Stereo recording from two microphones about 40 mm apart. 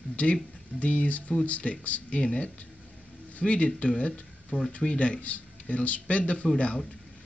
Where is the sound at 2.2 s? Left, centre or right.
Left.